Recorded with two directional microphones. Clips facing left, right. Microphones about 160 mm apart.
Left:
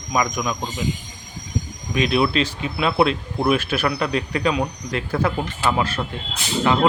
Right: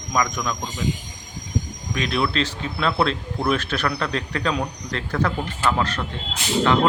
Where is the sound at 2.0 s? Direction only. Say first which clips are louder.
Left 4 dB; 15° left (ahead or behind).